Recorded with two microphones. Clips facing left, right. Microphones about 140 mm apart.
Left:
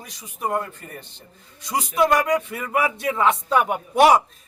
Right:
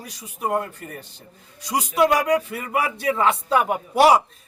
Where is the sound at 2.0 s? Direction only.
10° right (ahead or behind).